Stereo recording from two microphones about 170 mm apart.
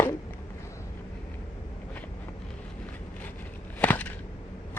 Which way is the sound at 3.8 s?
10° left (ahead or behind).